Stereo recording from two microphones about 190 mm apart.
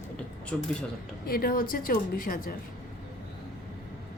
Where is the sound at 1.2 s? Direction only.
50° left (ahead or behind).